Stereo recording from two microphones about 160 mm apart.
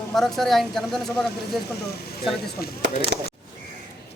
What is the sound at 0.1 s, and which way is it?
Speech, centre (ahead or behind).